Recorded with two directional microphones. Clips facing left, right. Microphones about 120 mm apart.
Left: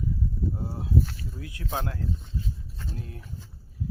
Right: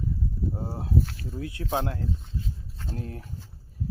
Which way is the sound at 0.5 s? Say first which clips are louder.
Right 1 dB; 35° right (ahead or behind).